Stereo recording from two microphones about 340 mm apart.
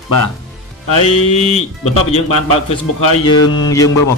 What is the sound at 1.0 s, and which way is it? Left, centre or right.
Mantra, centre.